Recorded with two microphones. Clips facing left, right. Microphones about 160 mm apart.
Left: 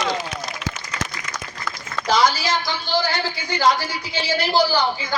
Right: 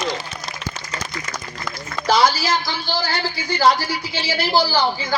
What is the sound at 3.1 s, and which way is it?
Speech, 35° right (ahead or behind).